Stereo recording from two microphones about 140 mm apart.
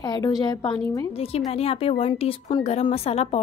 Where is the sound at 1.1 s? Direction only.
45° left (ahead or behind).